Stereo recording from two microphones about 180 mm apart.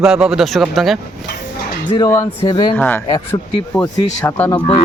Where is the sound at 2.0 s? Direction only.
15° left (ahead or behind).